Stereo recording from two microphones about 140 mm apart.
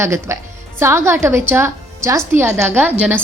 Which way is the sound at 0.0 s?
20° right (ahead or behind).